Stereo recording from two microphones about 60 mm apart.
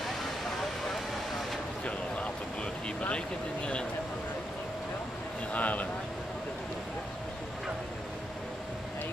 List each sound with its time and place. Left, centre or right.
5.5 s speech: left